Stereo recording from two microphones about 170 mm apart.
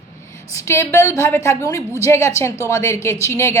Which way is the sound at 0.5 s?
15° left (ahead or behind).